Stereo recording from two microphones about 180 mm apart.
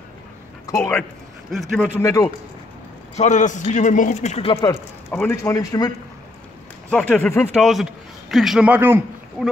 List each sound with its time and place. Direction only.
0.7 s speech: 15° left (ahead or behind)
3.2 s a man's voice: 45° left (ahead or behind)
4.6 s a man's voice: 15° left (ahead or behind)
6.9 s speech: 5° left (ahead or behind)
7.5 s a man's voice: centre (ahead or behind)